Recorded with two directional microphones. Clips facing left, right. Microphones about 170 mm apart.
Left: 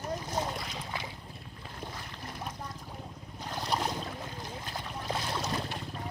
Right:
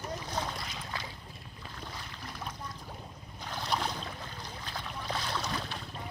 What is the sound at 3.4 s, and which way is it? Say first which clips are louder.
Boat: left 1 dB; 10° left (ahead or behind).